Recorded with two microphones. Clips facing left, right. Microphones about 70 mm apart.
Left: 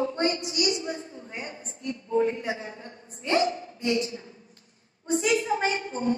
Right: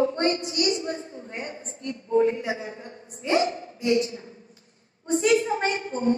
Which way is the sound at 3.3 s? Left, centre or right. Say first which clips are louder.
Right 1 dB; right.